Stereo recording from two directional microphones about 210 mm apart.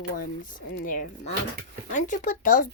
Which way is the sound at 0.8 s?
40° left (ahead or behind).